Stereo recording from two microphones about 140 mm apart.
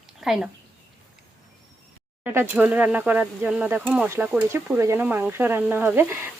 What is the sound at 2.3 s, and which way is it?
Speech, 15° right (ahead or behind).